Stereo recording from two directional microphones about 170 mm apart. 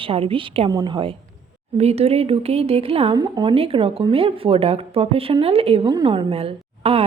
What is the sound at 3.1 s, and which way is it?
Speech, 25° right (ahead or behind).